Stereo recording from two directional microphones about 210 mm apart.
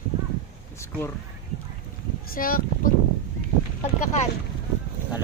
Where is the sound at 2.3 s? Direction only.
45° left (ahead or behind).